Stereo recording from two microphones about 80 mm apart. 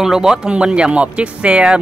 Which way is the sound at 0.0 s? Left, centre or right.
Centre.